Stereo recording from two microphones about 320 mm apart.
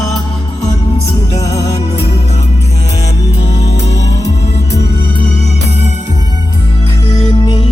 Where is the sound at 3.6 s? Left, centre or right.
Left.